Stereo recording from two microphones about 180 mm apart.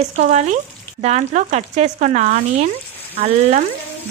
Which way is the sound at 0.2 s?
40° right (ahead or behind).